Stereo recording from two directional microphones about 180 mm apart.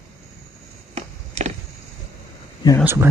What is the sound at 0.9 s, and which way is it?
Chop, 35° right (ahead or behind).